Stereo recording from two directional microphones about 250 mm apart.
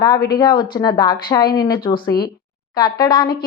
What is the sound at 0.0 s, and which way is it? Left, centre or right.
Speech, centre.